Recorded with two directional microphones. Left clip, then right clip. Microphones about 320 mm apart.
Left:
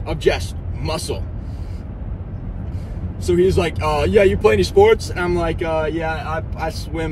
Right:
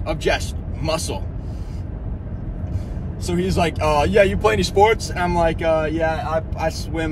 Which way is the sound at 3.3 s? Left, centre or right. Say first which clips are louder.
Left 3 dB; centre.